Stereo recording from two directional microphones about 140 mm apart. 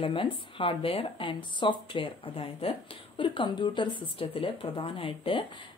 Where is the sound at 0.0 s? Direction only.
40° left (ahead or behind).